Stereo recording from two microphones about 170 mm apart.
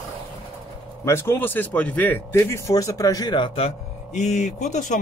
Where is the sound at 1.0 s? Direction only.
15° left (ahead or behind); by 3.7 s 30° left (ahead or behind).